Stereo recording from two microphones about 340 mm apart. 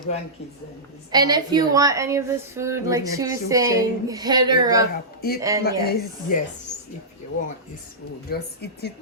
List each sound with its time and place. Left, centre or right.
1.1 s a woman's voice: centre
5.6 s speech: left
8.3 s speech: left